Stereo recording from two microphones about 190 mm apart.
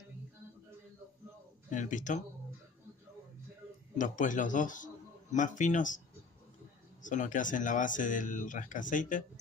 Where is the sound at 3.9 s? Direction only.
45° left (ahead or behind).